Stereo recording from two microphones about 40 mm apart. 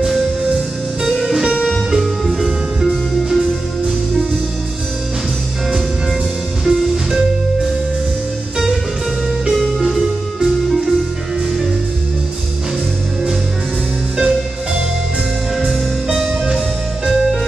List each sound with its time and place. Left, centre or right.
1.9 s music: centre
6.6 s music: centre
9.5 s music: centre
14.1 s music: centre
15.5 s music: centre